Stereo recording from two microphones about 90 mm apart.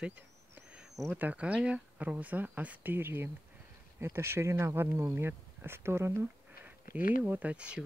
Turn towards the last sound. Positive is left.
turn(degrees=-15)  # may be behind; listen again after turning